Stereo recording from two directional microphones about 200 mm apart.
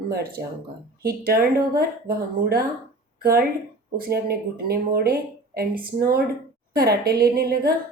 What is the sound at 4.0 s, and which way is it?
A woman's voice, 50° right (ahead or behind).